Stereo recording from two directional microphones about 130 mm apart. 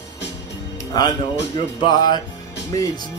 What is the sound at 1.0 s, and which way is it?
Speech, 30° left (ahead or behind).